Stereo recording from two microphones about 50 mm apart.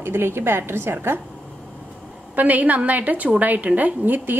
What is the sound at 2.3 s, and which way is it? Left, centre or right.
A woman's voice, right.